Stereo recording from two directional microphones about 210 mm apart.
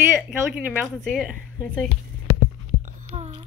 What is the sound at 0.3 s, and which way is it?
A woman's voice, 10° right (ahead or behind).